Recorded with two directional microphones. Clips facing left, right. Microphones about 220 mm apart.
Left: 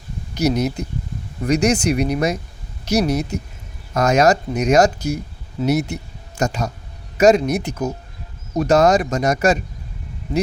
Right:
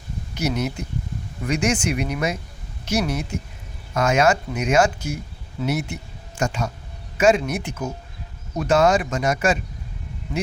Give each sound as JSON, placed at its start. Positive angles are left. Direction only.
{"t": 0.3, "sound": "speech", "side_deg": 40}